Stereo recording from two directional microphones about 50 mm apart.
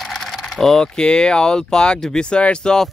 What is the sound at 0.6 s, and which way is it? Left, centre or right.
Speech, centre.